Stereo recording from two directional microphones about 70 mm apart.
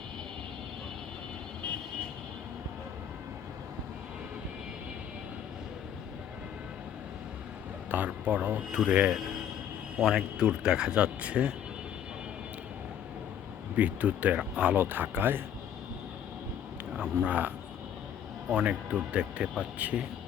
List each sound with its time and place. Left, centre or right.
7.9 s speech: right
13.7 s speech: right
14.8 s speech: right
17.2 s speech: right
18.5 s speech: centre